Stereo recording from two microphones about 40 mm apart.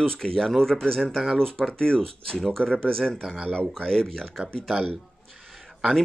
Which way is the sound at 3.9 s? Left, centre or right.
Centre.